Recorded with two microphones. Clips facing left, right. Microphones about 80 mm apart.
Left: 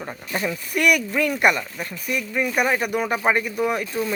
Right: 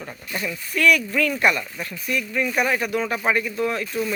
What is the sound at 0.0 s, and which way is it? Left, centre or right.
A man's voice, left.